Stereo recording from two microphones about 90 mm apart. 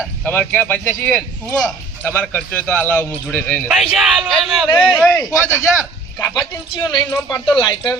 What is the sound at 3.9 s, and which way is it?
Speech, 5° right (ahead or behind).